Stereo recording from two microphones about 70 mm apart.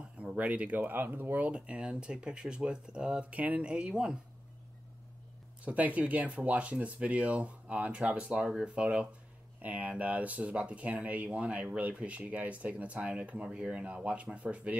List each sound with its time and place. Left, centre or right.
0.2 s speech: centre
5.7 s speech: right